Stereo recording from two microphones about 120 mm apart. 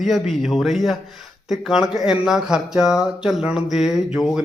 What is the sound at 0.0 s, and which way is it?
Speech, centre (ahead or behind).